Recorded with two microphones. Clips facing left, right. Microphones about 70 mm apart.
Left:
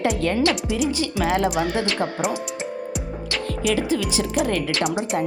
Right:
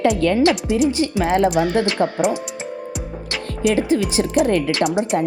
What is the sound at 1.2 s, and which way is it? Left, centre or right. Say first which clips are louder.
Speech: right 4 dB; right.